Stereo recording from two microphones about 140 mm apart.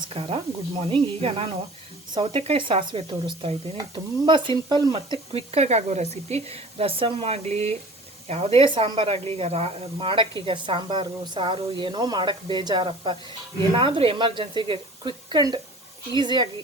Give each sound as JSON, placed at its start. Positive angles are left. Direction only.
{"t": 0.1, "sound": "speech", "side_deg": -45}
{"t": 4.9, "sound": "speech", "side_deg": -40}